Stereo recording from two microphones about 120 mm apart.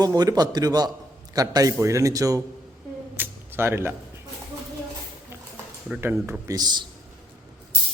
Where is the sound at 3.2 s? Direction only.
20° right (ahead or behind).